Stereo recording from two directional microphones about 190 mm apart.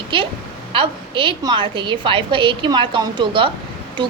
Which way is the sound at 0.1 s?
25° right (ahead or behind).